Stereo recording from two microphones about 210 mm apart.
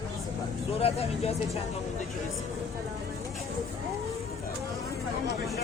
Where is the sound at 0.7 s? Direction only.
30° left (ahead or behind).